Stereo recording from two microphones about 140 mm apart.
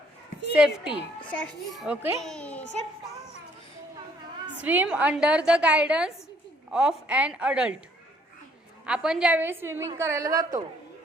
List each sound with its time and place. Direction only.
0.5 s a child's voice: 5° right (ahead or behind)
1.2 s a child's voice: 10° left (ahead or behind)
4.6 s a woman's voice: 10° right (ahead or behind)
8.9 s a woman's voice: 5° right (ahead or behind); by 10.6 s 25° right (ahead or behind)